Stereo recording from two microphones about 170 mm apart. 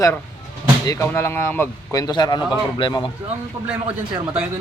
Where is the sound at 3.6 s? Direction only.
20° right (ahead or behind).